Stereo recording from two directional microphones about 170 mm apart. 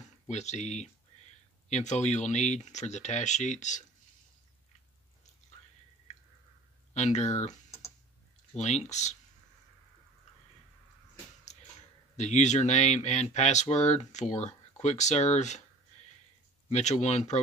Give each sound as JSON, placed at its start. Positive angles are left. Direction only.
{"t": 0.3, "sound": "speech", "side_deg": 40}
{"t": 6.9, "sound": "speech", "side_deg": 40}
{"t": 12.2, "sound": "speech", "side_deg": 45}
{"t": 16.6, "sound": "speech", "side_deg": 40}